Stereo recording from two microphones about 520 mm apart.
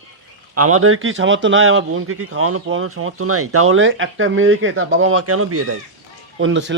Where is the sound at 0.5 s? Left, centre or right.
Right.